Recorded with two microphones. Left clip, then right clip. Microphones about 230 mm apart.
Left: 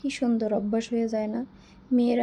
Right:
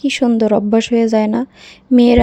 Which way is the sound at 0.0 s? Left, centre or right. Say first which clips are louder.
Right 13 dB; right.